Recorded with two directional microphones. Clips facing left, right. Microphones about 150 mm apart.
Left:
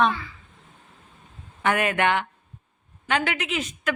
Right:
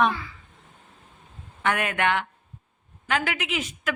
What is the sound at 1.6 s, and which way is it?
Speech, centre (ahead or behind).